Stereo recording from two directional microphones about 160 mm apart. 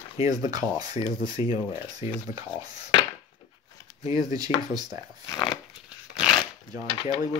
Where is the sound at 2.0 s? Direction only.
35° left (ahead or behind).